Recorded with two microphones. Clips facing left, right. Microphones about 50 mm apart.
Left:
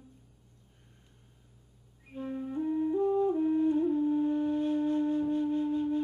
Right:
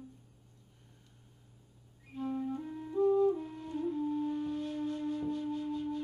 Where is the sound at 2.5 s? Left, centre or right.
Left.